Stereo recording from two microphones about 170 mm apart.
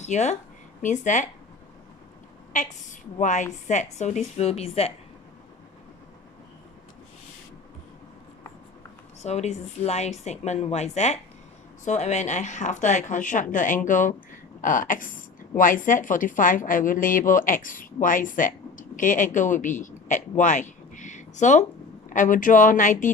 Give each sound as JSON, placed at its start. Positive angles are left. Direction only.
{"t": 0.0, "sound": "a woman's voice", "side_deg": 45}
{"t": 3.2, "sound": "a woman's voice", "side_deg": 45}
{"t": 9.2, "sound": "a woman's voice", "side_deg": 40}